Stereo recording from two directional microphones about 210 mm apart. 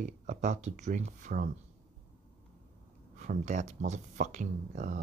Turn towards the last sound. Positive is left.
turn(degrees=-35)  # may be behind; listen again after turning